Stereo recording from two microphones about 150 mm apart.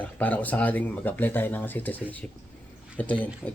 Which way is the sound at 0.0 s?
10° left (ahead or behind).